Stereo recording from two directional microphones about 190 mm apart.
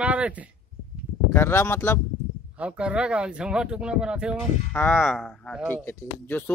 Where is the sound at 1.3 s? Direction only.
10° left (ahead or behind).